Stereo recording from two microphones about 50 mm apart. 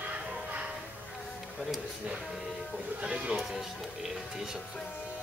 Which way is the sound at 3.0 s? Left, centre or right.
Centre.